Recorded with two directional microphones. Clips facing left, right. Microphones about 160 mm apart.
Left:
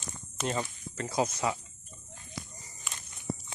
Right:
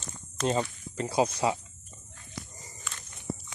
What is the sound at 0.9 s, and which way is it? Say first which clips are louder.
Speech: right 4 dB; 30° right (ahead or behind).